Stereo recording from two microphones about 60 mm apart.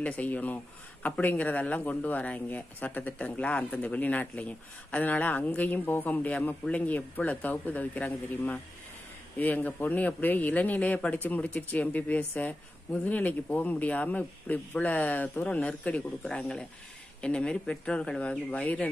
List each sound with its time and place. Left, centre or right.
0.0 s speech: left